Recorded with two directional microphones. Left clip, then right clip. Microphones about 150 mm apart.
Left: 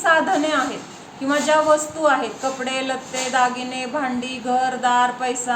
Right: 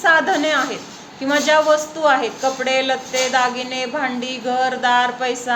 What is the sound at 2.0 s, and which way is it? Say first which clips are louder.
A woman's voice: right 3 dB; 25° right (ahead or behind).